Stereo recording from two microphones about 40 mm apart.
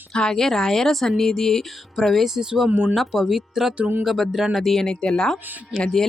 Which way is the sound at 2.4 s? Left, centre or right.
Centre.